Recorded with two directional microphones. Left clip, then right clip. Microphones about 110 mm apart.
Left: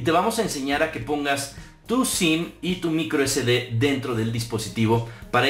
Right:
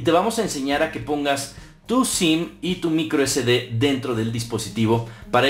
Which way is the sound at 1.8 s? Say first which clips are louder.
Right 2 dB; 20° right (ahead or behind).